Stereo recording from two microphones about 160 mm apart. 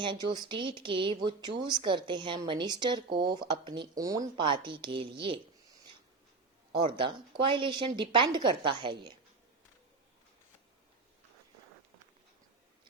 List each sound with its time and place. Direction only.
0.0 s speech: 30° right (ahead or behind)
6.7 s a woman's voice: 30° right (ahead or behind)